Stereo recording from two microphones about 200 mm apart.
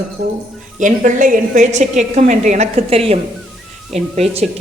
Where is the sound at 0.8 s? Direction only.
40° right (ahead or behind).